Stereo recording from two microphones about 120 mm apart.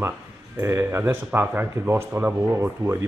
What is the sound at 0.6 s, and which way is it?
Speech, 20° right (ahead or behind).